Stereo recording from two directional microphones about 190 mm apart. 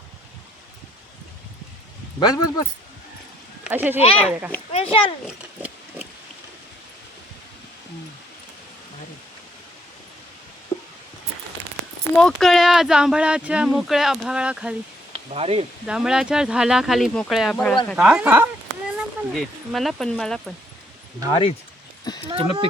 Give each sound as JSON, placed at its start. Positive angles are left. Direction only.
{"t": 2.1, "sound": "a man's voice", "side_deg": 20}
{"t": 3.6, "sound": "speech", "side_deg": -10}
{"t": 4.7, "sound": "speech", "side_deg": 30}
{"t": 10.7, "sound": "a sound", "side_deg": 20}
{"t": 12.1, "sound": "speech", "side_deg": 0}
{"t": 15.1, "sound": "speech", "side_deg": -30}
{"t": 15.9, "sound": "speech", "side_deg": -5}
{"t": 22.3, "sound": "speech", "side_deg": -30}